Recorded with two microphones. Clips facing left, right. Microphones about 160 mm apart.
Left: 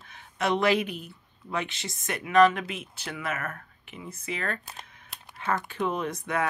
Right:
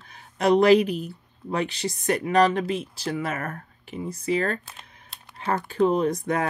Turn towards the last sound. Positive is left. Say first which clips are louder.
# right 5 dB
turn(degrees=-35)  # may be behind; listen again after turning